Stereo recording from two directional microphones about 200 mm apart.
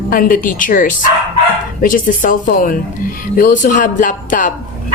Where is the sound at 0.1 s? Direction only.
45° left (ahead or behind).